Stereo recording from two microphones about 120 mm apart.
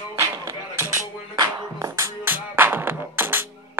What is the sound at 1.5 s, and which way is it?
Music, 30° right (ahead or behind).